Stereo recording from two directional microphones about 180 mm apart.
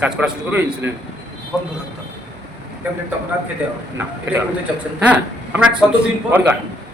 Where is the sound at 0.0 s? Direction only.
10° right (ahead or behind).